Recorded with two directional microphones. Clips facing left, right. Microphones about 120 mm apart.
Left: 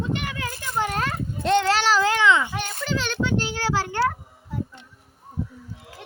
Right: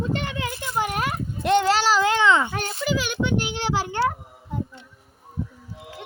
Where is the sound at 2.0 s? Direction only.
20° right (ahead or behind).